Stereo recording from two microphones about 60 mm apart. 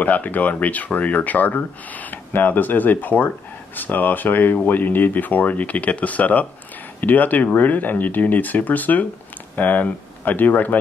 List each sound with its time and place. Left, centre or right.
0.0 s speech: left